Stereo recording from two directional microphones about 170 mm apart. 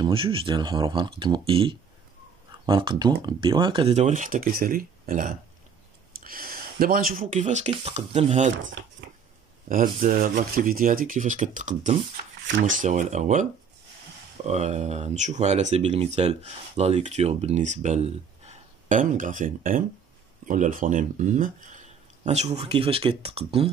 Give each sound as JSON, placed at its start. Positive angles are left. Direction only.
{"t": 0.0, "sound": "speech", "side_deg": -30}
{"t": 9.7, "sound": "speech", "side_deg": -55}